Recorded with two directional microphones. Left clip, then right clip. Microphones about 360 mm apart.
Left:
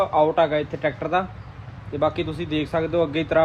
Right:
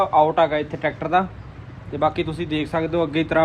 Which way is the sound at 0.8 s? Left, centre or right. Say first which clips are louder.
Right 2 dB; right.